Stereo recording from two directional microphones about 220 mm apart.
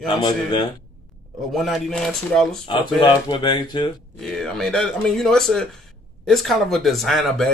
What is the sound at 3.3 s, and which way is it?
Speech, 20° left (ahead or behind).